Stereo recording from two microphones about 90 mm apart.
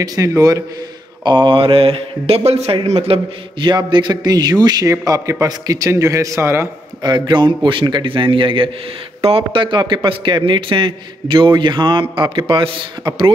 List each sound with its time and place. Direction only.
0.0 s a man's voice: 45° right (ahead or behind)
1.2 s a man's voice: 60° right (ahead or behind); by 6.7 s 30° right (ahead or behind)
7.0 s a man's voice: 55° right (ahead or behind); by 8.6 s 70° right (ahead or behind)
9.2 s a man's voice: 85° right; by 13.3 s 65° right (ahead or behind)